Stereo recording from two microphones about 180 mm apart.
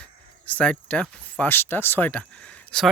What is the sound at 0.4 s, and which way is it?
Speech, 5° left (ahead or behind).